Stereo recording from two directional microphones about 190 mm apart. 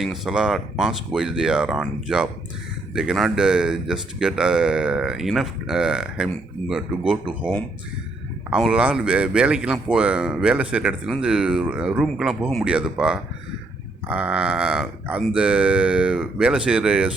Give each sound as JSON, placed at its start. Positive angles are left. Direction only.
{"t": 0.0, "sound": "speech", "side_deg": 0}
{"t": 8.4, "sound": "speech", "side_deg": -5}